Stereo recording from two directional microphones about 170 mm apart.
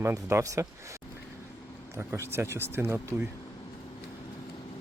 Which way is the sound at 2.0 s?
15° right (ahead or behind).